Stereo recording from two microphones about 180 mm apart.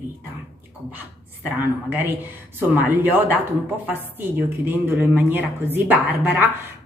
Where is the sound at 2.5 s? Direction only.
10° right (ahead or behind).